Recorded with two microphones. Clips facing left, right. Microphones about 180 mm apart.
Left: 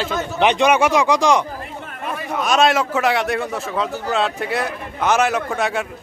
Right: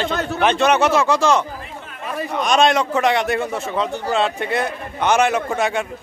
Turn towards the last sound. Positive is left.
turn(degrees=0)  # may be behind; listen again after turning